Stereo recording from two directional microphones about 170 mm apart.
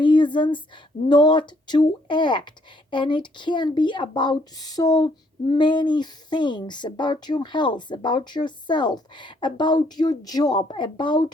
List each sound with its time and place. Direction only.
0.0 s a woman's voice: 30° left (ahead or behind)